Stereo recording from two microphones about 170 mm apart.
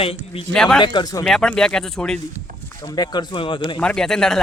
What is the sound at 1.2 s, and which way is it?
Speech, 5° left (ahead or behind).